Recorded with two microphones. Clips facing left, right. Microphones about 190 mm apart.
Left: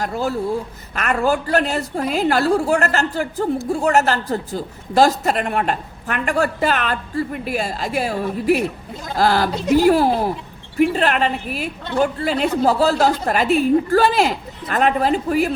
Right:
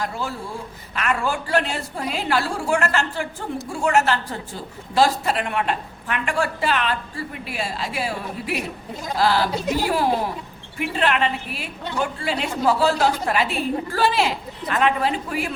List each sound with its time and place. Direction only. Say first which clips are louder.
0.0 s a woman's voice: left 7 dB; 40° left (ahead or behind)